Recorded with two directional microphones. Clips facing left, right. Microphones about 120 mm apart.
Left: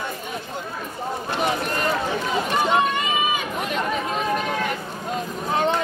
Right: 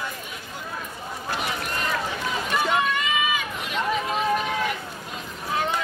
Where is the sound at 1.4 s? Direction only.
45° left (ahead or behind).